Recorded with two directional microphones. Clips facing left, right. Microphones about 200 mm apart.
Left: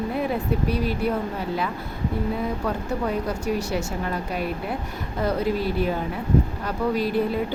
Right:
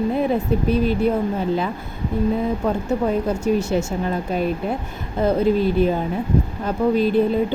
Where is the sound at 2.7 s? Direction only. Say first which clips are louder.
Right 6 dB; 25° right (ahead or behind).